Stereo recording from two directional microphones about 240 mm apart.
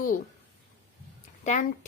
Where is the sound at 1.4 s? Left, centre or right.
Left.